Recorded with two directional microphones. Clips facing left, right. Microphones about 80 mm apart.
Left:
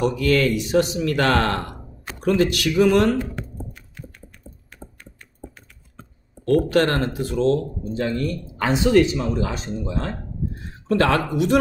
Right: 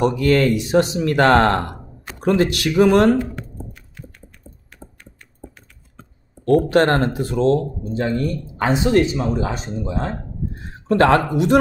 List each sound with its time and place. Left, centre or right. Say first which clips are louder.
0.2 s speech: right 3 dB; right
6.4 s speech: right 3 dB; right
10.9 s speech: right 4 dB; right